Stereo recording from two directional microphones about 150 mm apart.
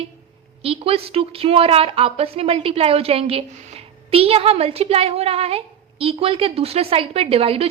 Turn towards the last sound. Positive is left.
turn(degrees=-40)  # may be behind; listen again after turning